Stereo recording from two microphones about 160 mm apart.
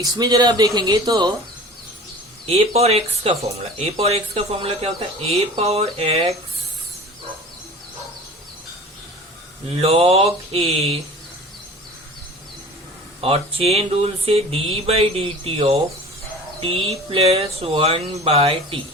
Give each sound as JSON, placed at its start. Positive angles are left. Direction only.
{"t": 0.0, "sound": "speech", "side_deg": -25}
{"t": 2.5, "sound": "speech", "side_deg": -40}
{"t": 9.6, "sound": "speech", "side_deg": -40}
{"t": 13.2, "sound": "speech", "side_deg": -35}